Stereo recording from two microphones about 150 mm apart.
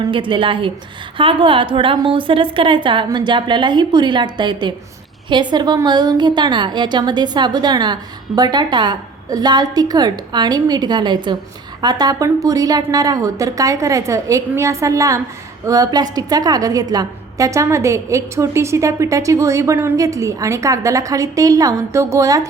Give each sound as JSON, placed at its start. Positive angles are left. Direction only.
{"t": 0.0, "sound": "a woman's voice", "side_deg": -35}